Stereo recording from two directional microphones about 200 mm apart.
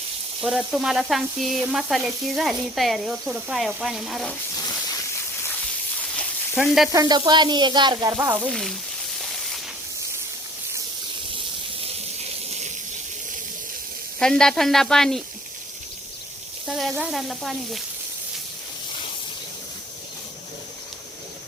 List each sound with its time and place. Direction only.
0.4 s sizzle: centre (ahead or behind)
6.6 s sizzle: centre (ahead or behind)
6.9 s sizzle: 20° right (ahead or behind)
8.4 s sizzle: centre (ahead or behind)
9.1 s hiss: centre (ahead or behind)
12.5 s a sound: 35° right (ahead or behind)
14.2 s sizzle: 5° left (ahead or behind)
16.6 s sizzle: centre (ahead or behind)